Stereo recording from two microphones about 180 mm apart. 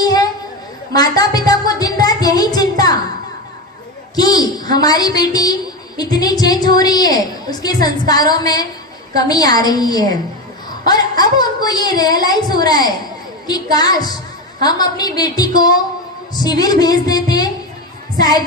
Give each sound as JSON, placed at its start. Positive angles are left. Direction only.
{"t": 0.0, "sound": "chatter", "side_deg": 20}
{"t": 0.9, "sound": "music", "side_deg": 20}
{"t": 4.1, "sound": "a woman's voice", "side_deg": 20}
{"t": 11.2, "sound": "a woman's voice", "side_deg": 20}
{"t": 18.2, "sound": "female singing", "side_deg": 20}